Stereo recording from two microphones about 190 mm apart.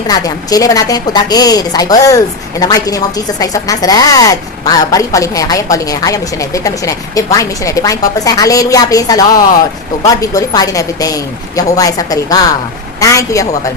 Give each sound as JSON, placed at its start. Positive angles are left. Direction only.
{"t": 0.1, "sound": "a woman's voice", "side_deg": 20}